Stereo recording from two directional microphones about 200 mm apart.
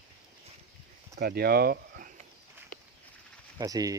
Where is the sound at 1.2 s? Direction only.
50° right (ahead or behind).